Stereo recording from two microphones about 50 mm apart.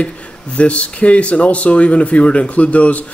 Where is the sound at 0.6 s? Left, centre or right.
Left.